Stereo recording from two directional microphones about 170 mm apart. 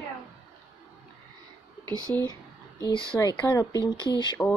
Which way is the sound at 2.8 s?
30° left (ahead or behind).